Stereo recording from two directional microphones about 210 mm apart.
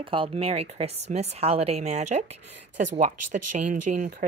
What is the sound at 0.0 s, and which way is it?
A woman's voice, 25° right (ahead or behind).